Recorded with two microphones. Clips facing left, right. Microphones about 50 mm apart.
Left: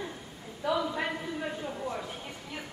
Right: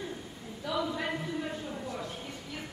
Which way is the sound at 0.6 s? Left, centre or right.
Centre.